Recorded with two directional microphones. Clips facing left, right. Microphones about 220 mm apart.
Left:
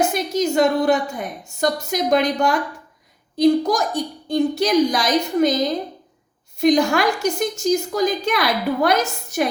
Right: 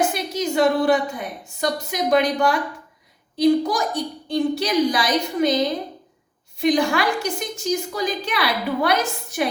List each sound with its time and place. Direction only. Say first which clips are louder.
0.0 s a woman's voice: left 3 dB; 45° left (ahead or behind)